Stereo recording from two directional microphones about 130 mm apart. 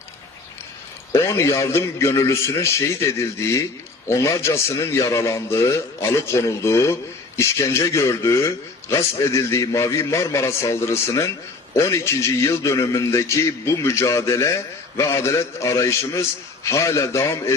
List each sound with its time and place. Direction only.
1.1 s a man's voice: 20° left (ahead or behind)